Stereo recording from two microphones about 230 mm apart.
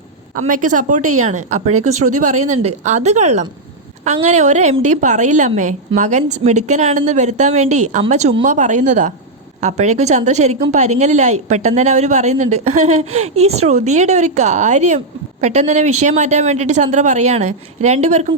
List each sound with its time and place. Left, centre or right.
0.3 s a woman's voice: right